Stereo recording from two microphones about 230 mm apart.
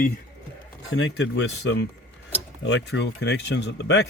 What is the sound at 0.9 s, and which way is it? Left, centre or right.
Speech, left.